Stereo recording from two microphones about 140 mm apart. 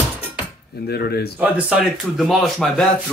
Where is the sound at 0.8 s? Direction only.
90° left.